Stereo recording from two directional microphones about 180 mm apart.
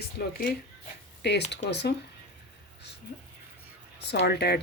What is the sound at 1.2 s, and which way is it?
Speech, 70° left (ahead or behind).